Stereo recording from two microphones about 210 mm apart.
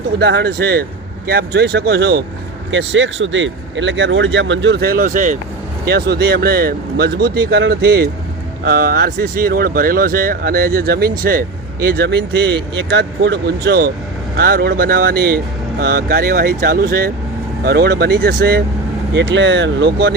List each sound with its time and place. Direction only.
0.2 s speech: 50° right (ahead or behind)
2.6 s speech: 65° right (ahead or behind); by 5.4 s 35° right (ahead or behind)
5.8 s speech: 50° right (ahead or behind)